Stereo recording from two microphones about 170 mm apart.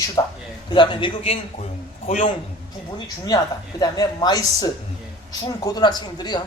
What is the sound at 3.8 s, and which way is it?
A man's voice, 25° left (ahead or behind).